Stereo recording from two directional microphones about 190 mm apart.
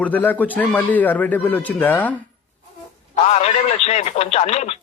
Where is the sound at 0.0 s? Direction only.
10° left (ahead or behind).